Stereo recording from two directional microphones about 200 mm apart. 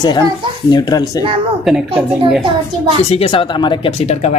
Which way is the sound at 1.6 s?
Centre (ahead or behind).